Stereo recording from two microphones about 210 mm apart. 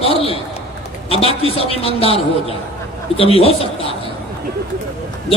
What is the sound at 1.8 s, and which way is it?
A man's voice, 30° left (ahead or behind).